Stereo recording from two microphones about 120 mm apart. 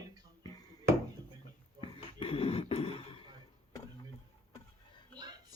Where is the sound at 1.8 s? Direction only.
50° left (ahead or behind).